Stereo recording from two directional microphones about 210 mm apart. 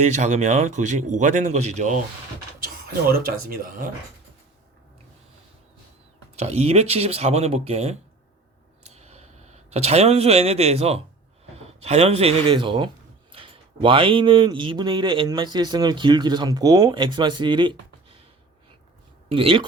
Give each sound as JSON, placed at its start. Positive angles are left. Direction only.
{"t": 0.0, "sound": "speech", "side_deg": -35}
{"t": 3.1, "sound": "speech", "side_deg": -45}
{"t": 6.3, "sound": "speech", "side_deg": -30}
{"t": 8.8, "sound": "a sound", "side_deg": -30}
{"t": 11.5, "sound": "speech", "side_deg": -30}
{"t": 19.3, "sound": "speech", "side_deg": -25}